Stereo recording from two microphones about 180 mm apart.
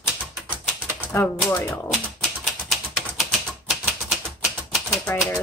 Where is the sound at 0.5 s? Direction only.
10° right (ahead or behind).